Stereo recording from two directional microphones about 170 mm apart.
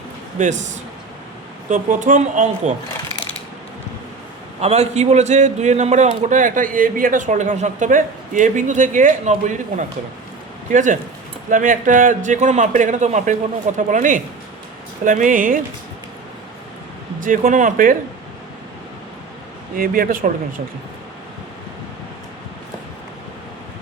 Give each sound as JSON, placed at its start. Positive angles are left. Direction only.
{"t": 0.3, "sound": "a man's voice", "side_deg": -45}
{"t": 1.7, "sound": "a man's voice", "side_deg": -50}
{"t": 4.6, "sound": "a man's voice", "side_deg": -40}
{"t": 17.2, "sound": "a man's voice", "side_deg": -50}
{"t": 19.7, "sound": "speech", "side_deg": -55}